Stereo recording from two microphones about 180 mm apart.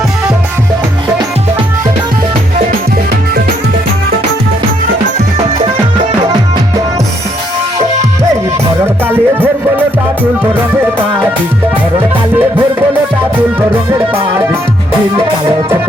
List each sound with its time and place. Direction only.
9.0 s music: 10° right (ahead or behind)